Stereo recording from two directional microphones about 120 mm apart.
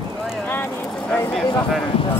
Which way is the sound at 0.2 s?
Centre (ahead or behind).